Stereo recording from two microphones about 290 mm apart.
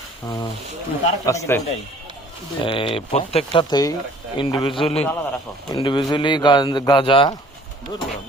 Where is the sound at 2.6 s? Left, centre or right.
Centre.